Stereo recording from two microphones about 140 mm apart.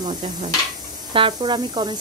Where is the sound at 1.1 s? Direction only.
35° right (ahead or behind).